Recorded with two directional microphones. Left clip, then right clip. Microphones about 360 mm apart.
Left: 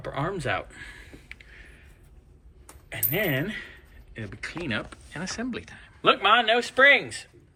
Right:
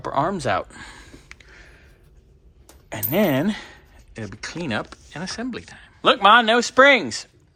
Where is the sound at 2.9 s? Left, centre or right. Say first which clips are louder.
Right 6 dB; centre.